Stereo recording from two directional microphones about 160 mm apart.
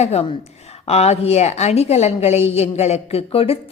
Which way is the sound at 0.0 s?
40° left (ahead or behind).